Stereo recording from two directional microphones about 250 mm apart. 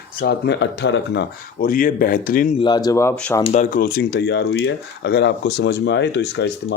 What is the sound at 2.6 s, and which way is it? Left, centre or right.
Speech, centre.